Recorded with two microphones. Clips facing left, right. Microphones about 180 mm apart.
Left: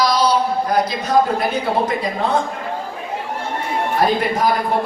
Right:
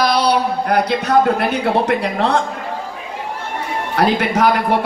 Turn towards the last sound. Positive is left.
turn(degrees=-80)